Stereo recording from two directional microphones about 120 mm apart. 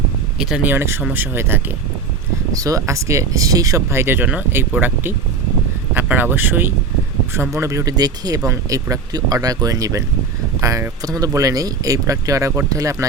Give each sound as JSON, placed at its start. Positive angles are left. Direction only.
{"t": 0.3, "sound": "speech", "side_deg": -5}
{"t": 0.7, "sound": "speech", "side_deg": -20}
{"t": 2.5, "sound": "speech", "side_deg": -30}